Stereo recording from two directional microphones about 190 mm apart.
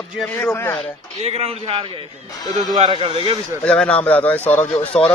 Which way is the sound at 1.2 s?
35° right (ahead or behind).